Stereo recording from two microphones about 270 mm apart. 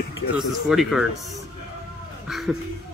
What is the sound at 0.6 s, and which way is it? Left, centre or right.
Speech, centre.